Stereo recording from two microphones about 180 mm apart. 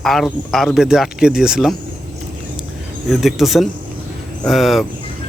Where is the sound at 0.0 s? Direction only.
Centre (ahead or behind).